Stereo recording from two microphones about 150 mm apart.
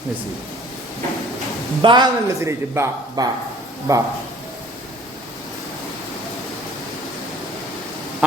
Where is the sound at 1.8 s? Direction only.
30° right (ahead or behind).